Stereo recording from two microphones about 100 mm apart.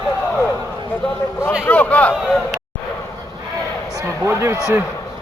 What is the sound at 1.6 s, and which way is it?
Speech, 15° left (ahead or behind).